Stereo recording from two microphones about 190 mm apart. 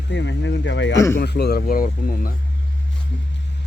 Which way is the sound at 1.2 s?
60° left (ahead or behind).